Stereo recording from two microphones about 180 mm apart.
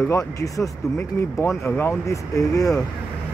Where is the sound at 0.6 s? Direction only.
10° left (ahead or behind).